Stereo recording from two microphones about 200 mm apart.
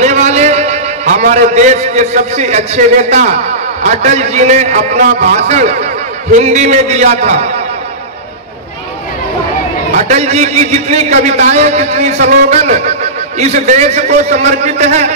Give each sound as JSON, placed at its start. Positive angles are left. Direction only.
{"t": 0.0, "sound": "a man's voice", "side_deg": -35}
{"t": 9.9, "sound": "a man's voice", "side_deg": -35}